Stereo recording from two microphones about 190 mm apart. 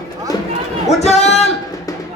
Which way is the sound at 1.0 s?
35° left (ahead or behind).